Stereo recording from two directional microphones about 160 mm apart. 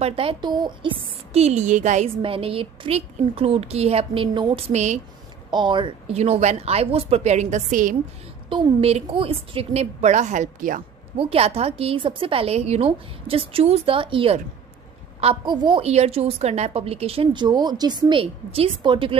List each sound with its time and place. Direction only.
0.0 s speech: 35° right (ahead or behind)
2.2 s speech: 35° right (ahead or behind)
5.5 s speech: 30° right (ahead or behind)
6.1 s speech: 40° right (ahead or behind)
8.5 s speech: 35° right (ahead or behind); by 10.8 s 55° right (ahead or behind)
11.1 s a woman's voice: 35° right (ahead or behind)
15.8 s speech: 40° right (ahead or behind)